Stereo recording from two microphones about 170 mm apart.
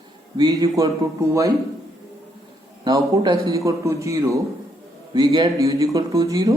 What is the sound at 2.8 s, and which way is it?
A man's voice, 25° right (ahead or behind).